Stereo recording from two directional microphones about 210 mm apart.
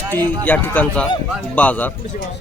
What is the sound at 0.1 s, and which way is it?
Speech, 10° left (ahead or behind).